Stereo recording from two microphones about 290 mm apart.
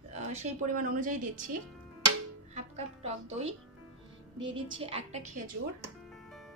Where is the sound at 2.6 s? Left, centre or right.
Right.